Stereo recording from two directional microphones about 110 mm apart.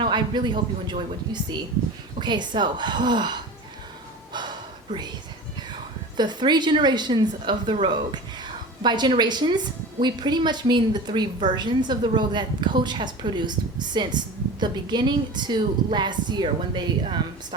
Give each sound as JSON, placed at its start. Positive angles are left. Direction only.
{"t": 0.0, "sound": "a woman's voice", "side_deg": -45}
{"t": 4.3, "sound": "gasp", "side_deg": -40}
{"t": 6.1, "sound": "a woman's voice", "side_deg": -40}